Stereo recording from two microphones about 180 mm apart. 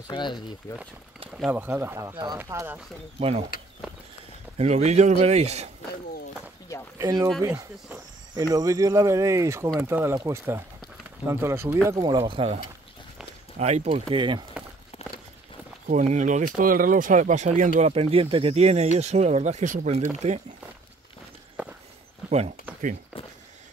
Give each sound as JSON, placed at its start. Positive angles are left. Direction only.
{"t": 0.1, "sound": "speech", "side_deg": 25}
{"t": 1.3, "sound": "speech", "side_deg": -5}
{"t": 3.2, "sound": "speech", "side_deg": -35}
{"t": 4.6, "sound": "speech", "side_deg": -40}
{"t": 7.0, "sound": "speech", "side_deg": -20}
{"t": 7.4, "sound": "speech", "side_deg": -10}
{"t": 13.6, "sound": "speech", "side_deg": -35}
{"t": 14.0, "sound": "speech", "side_deg": -25}
{"t": 15.9, "sound": "speech", "side_deg": -40}
{"t": 22.2, "sound": "a sound", "side_deg": -5}